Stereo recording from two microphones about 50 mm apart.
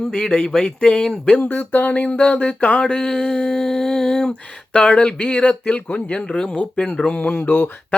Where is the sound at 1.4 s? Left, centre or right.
Left.